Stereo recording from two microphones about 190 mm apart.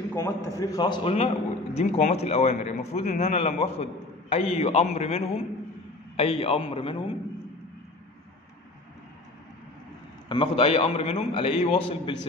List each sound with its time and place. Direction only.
0.1 s a man's voice: 15° left (ahead or behind)
10.2 s a man's voice: 25° left (ahead or behind)